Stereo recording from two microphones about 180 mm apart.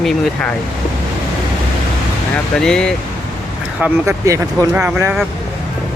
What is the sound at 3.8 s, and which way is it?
Speech, 15° right (ahead or behind).